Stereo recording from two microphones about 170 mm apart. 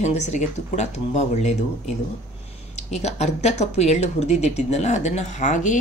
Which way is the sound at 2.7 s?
40° left (ahead or behind).